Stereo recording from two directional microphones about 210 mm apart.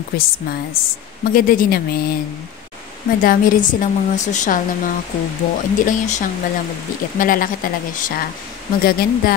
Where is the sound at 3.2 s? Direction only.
40° left (ahead or behind).